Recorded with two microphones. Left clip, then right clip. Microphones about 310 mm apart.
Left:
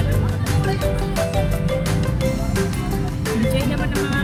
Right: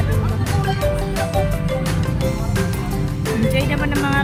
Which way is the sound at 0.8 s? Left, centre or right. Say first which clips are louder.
Right 1 dB; centre.